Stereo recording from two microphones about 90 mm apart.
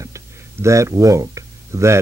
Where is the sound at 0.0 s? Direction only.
35° right (ahead or behind).